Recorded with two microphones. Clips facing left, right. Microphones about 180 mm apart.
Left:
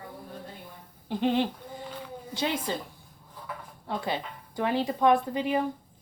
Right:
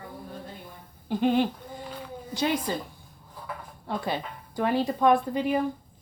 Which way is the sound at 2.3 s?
25° left (ahead or behind).